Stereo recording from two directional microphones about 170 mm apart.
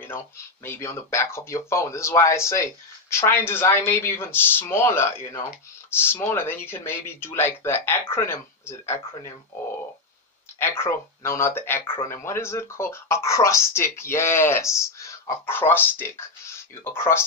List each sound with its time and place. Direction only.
0.7 s speech: 15° left (ahead or behind)
10.6 s speech: 15° left (ahead or behind)